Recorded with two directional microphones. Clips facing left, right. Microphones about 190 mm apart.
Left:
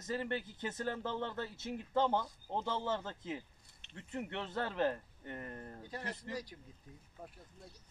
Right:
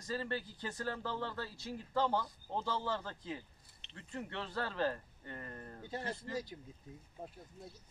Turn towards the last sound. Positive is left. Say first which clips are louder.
# right 4 dB
turn(degrees=-25)  # may be behind; listen again after turning